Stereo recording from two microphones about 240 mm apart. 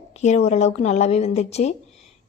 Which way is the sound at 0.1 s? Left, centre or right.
Left.